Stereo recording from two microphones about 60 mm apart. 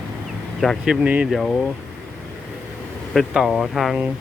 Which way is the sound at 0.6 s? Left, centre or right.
Centre.